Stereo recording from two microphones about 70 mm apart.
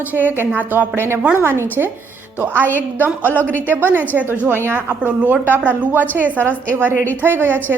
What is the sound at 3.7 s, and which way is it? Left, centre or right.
A woman's voice, right.